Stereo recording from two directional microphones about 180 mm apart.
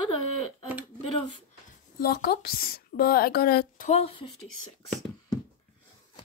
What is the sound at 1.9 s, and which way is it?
A woman's voice, 55° left (ahead or behind).